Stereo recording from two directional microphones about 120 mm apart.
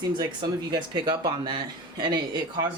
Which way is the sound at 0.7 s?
35° right (ahead or behind).